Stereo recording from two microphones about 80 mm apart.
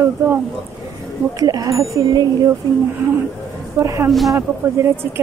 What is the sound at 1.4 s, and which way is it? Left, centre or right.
Speech, right.